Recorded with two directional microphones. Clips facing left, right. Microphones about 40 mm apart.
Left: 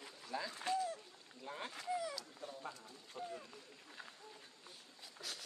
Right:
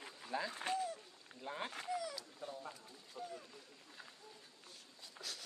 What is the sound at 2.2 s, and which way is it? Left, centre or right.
Cat, centre.